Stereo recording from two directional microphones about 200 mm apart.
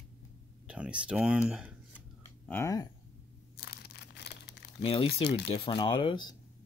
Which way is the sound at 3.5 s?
50° left (ahead or behind).